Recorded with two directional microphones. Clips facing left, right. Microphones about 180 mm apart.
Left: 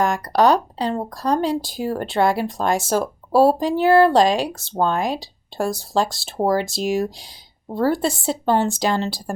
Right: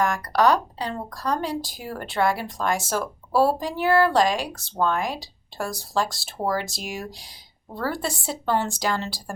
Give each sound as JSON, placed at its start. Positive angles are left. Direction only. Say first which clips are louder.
{"t": 0.0, "sound": "speech", "louder": "left 3 dB", "side_deg": 25}